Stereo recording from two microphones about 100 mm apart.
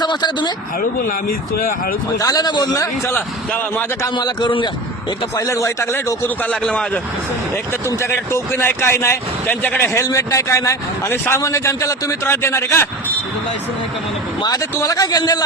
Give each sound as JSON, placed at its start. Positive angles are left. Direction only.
{"t": 0.0, "sound": "speech", "side_deg": 45}
{"t": 2.1, "sound": "a man's voice", "side_deg": 40}
{"t": 3.1, "sound": "speech", "side_deg": 20}
{"t": 4.1, "sound": "a man's voice", "side_deg": 50}
{"t": 5.4, "sound": "speech", "side_deg": 35}
{"t": 7.5, "sound": "speech", "side_deg": 25}
{"t": 14.4, "sound": "a man's voice", "side_deg": 40}